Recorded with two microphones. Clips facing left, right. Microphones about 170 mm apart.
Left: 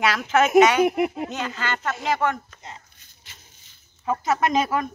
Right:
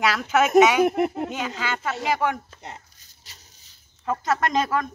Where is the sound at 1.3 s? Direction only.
5° right (ahead or behind).